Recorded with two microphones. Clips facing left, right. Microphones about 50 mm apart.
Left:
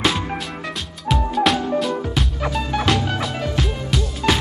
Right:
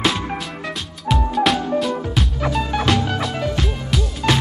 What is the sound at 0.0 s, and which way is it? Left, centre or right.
Music, centre.